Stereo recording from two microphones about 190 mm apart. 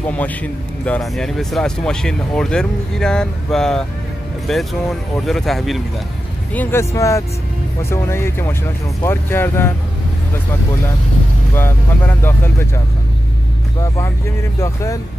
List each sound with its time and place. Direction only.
0.1 s speech: 5° left (ahead or behind)
11.5 s speech: 10° left (ahead or behind)